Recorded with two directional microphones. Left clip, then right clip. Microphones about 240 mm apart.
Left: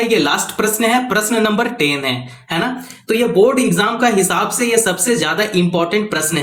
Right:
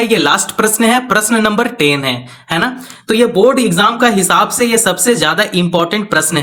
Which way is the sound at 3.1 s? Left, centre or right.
Right.